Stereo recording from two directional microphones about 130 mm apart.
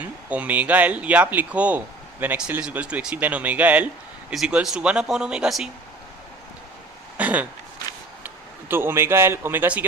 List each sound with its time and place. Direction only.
0.0 s speech: 10° right (ahead or behind)
7.2 s a man's voice: 10° right (ahead or behind)